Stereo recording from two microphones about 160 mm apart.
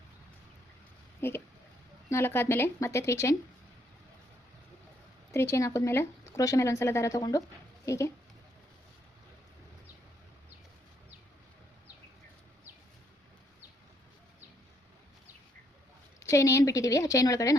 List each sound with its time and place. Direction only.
1.2 s speech: 15° left (ahead or behind)
5.3 s a woman's voice: 15° left (ahead or behind)
16.2 s a woman's voice: 20° left (ahead or behind)